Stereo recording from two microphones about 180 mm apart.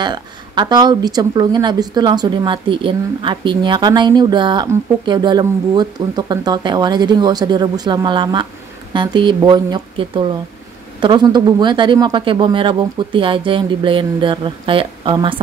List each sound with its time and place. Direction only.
0.0 s speech: 25° right (ahead or behind)